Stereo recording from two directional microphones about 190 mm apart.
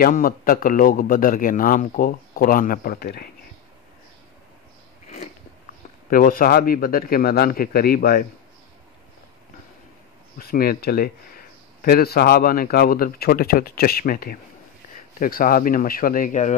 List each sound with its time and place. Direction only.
0.0 s speech: 50° left (ahead or behind)
6.0 s speech: 45° left (ahead or behind)
10.4 s speech: 50° left (ahead or behind)